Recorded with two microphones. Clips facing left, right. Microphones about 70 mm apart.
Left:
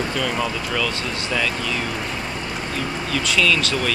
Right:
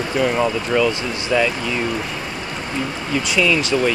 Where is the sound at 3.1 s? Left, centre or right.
Centre.